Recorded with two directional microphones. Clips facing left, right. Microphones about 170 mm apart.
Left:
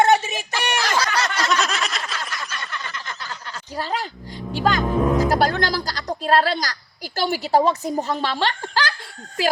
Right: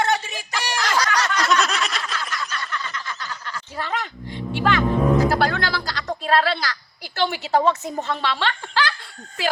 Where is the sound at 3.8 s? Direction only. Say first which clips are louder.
Left 1 dB; 35° left (ahead or behind).